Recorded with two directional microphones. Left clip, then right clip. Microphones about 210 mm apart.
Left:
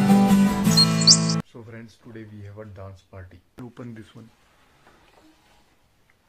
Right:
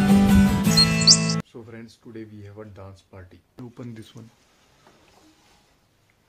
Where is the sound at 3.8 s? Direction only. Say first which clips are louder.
Right 2 dB; 20° right (ahead or behind).